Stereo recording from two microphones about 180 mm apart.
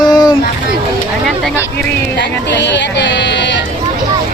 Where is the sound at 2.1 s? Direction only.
75° left (ahead or behind).